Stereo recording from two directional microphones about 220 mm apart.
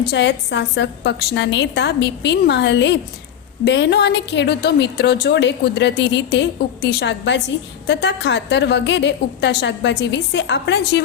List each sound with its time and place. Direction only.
0.0 s a woman's voice: 50° left (ahead or behind)